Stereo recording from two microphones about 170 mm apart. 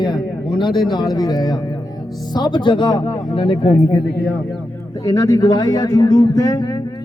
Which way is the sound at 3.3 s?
35° left (ahead or behind).